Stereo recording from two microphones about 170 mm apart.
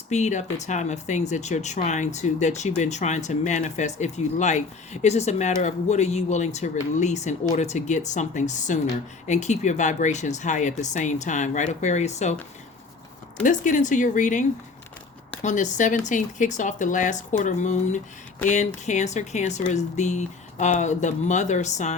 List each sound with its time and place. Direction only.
0.1 s speech: 45° left (ahead or behind)
13.4 s speech: 50° left (ahead or behind)